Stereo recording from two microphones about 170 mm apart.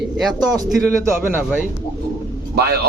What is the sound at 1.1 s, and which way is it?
Speech, 10° right (ahead or behind).